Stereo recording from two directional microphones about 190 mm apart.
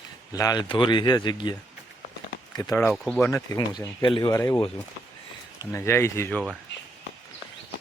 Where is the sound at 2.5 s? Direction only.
15° left (ahead or behind).